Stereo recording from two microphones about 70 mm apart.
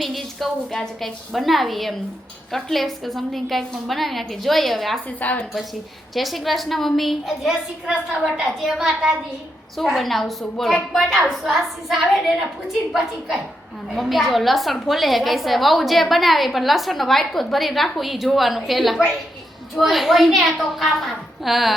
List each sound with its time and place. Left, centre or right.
0.0 s a woman's voice: centre
5.2 s a woman's voice: left
6.1 s a woman's voice: centre